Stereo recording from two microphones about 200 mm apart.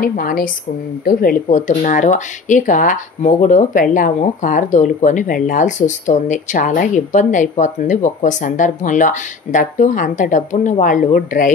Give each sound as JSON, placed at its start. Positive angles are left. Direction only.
{"t": 0.0, "sound": "a woman's voice", "side_deg": 45}